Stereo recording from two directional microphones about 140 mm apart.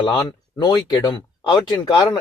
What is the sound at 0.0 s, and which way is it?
Speech, 30° left (ahead or behind).